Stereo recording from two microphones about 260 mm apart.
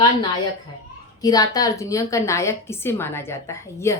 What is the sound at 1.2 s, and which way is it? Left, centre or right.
Speech, centre.